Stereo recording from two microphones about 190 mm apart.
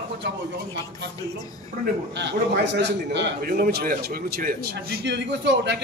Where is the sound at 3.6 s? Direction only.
55° right (ahead or behind).